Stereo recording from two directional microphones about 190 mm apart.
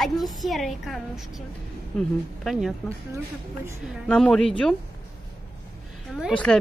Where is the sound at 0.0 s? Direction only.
Centre (ahead or behind).